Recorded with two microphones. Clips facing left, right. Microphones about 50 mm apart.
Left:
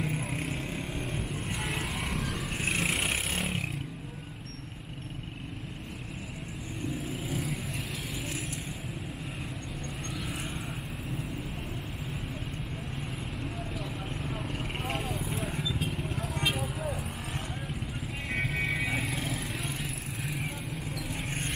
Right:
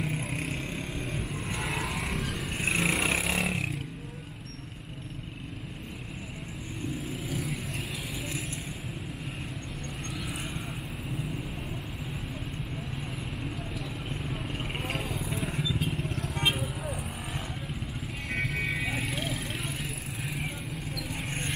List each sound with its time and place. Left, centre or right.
0.0 s vehicle: centre
3.3 s a sound: right
7.2 s vehicle: centre
13.7 s clip-clop: centre
14.8 s vehicle: centre